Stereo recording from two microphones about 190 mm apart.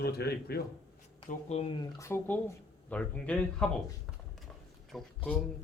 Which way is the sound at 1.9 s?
15° left (ahead or behind).